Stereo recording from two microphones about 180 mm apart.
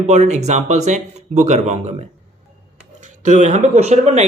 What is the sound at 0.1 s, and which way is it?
Speech, 40° right (ahead or behind).